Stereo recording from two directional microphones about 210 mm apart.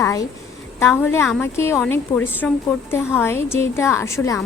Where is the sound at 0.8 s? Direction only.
10° left (ahead or behind).